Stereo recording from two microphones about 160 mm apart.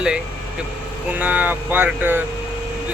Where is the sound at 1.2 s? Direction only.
10° right (ahead or behind).